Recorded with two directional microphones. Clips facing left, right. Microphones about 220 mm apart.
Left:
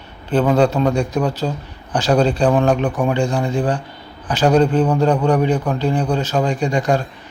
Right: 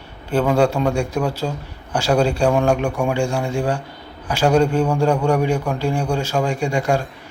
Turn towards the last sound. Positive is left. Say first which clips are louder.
# left 2 dB
turn(degrees=-10)  # may be behind; listen again after turning